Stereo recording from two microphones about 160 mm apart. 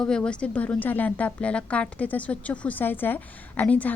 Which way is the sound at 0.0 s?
5° left (ahead or behind).